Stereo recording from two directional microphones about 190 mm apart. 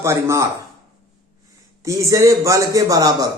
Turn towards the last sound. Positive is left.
turn(degrees=-20)  # may be behind; listen again after turning